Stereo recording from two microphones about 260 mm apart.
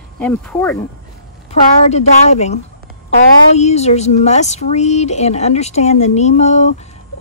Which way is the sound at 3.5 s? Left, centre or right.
Left.